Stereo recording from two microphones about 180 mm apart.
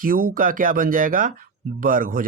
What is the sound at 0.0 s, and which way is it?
Speech, 50° right (ahead or behind).